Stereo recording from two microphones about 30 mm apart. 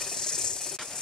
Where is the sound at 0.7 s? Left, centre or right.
Centre.